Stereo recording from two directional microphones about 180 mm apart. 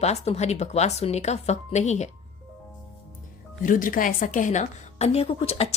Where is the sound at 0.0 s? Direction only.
35° left (ahead or behind).